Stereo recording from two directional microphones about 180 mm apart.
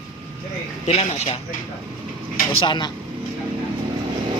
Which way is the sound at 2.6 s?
25° left (ahead or behind).